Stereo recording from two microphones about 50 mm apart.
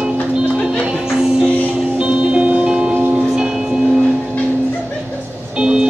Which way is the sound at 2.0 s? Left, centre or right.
Right.